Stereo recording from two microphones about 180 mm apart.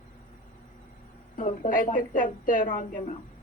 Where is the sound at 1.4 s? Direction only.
45° left (ahead or behind).